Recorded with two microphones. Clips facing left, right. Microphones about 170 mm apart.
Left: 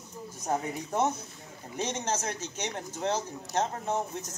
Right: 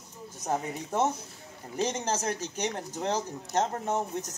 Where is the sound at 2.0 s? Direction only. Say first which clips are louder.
Right 2 dB; 35° right (ahead or behind).